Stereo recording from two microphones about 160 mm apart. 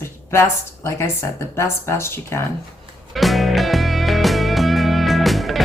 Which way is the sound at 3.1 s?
Centre (ahead or behind).